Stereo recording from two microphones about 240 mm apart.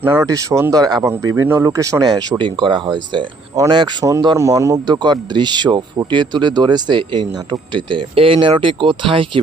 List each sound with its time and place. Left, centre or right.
0.0 s speech: centre